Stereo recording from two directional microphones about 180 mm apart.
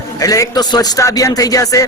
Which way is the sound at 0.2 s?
20° left (ahead or behind).